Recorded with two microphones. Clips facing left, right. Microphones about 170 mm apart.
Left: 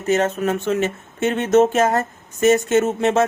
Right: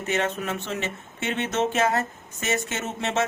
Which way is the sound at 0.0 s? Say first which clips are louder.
Left 8 dB; 40° left (ahead or behind).